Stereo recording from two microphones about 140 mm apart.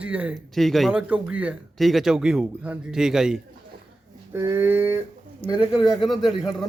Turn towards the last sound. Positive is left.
turn(degrees=-5)  # may be behind; listen again after turning